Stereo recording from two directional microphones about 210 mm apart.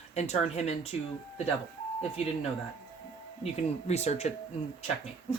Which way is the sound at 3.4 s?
30° left (ahead or behind).